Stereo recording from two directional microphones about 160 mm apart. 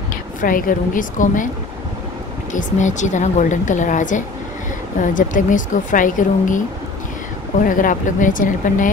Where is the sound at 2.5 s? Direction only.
50° left (ahead or behind).